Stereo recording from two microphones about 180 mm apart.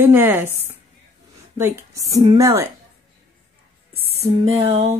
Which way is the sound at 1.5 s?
15° right (ahead or behind).